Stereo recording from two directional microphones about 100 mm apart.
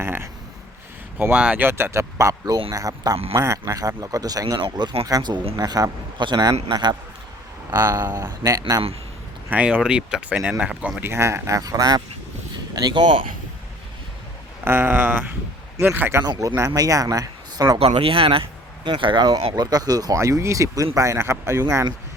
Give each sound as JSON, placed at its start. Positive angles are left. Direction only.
{"t": 0.0, "sound": "speech", "side_deg": -25}
{"t": 1.2, "sound": "speech", "side_deg": -10}
{"t": 5.0, "sound": "speech", "side_deg": -35}
{"t": 8.2, "sound": "speech", "side_deg": -30}
{"t": 9.5, "sound": "speech", "side_deg": -15}
{"t": 11.0, "sound": "speech", "side_deg": -30}
{"t": 14.6, "sound": "speech", "side_deg": -20}
{"t": 16.6, "sound": "speech", "side_deg": -35}
{"t": 17.7, "sound": "speech", "side_deg": -70}